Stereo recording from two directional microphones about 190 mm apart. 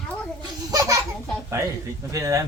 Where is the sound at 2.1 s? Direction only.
15° right (ahead or behind).